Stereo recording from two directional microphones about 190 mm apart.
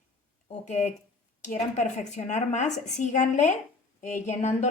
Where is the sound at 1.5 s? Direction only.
40° left (ahead or behind).